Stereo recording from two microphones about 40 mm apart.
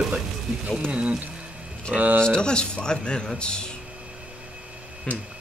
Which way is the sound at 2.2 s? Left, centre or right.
Left.